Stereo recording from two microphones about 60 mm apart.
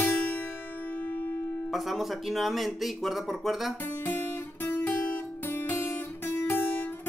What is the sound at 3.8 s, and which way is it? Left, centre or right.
Guitar, left.